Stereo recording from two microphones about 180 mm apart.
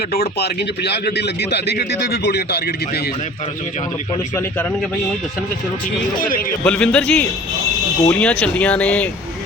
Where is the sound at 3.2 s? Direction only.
40° left (ahead or behind).